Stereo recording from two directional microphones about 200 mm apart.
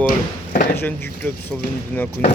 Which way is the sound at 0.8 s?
10° left (ahead or behind).